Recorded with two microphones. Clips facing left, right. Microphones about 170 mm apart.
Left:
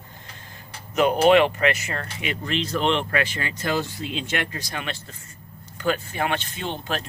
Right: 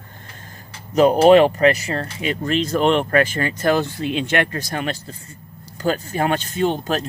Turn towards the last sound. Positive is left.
turn(degrees=-45)  # may be behind; listen again after turning